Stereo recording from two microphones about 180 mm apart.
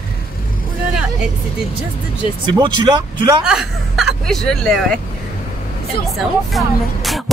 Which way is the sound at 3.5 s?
Centre (ahead or behind).